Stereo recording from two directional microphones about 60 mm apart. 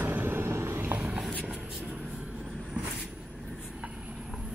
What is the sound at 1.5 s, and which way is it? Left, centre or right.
Vehicle, centre.